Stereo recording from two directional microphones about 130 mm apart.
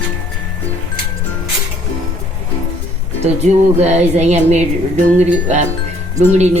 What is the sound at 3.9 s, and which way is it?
Speech, 60° right (ahead or behind).